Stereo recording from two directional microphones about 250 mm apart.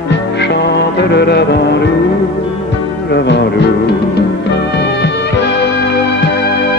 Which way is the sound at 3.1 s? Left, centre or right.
Left.